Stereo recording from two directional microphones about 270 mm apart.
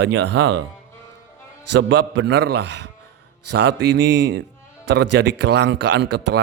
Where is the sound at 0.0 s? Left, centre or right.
Right.